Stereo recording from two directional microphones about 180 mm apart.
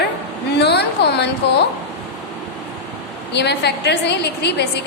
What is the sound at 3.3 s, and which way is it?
A woman's voice, 65° left (ahead or behind).